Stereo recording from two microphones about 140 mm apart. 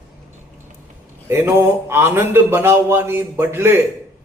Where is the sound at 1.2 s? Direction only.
20° right (ahead or behind).